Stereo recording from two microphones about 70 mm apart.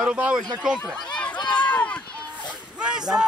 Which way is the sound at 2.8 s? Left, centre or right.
Centre.